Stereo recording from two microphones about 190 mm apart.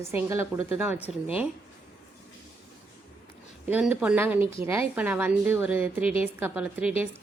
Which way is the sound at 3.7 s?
5° right (ahead or behind).